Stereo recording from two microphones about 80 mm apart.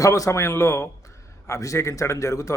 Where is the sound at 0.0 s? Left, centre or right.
Left.